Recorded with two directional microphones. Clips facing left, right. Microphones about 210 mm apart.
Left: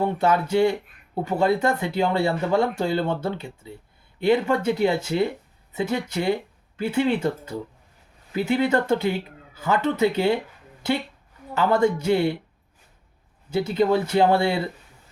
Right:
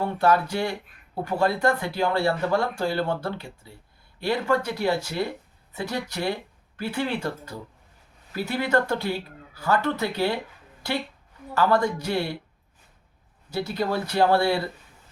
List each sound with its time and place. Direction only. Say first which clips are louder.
0.0 s speech: left 1 dB; 20° left (ahead or behind)
11.5 s speech: left 2 dB; 20° left (ahead or behind)
13.5 s speech: left 6 dB; 20° left (ahead or behind)